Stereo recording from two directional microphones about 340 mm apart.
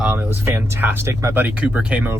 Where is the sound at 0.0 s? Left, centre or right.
Centre.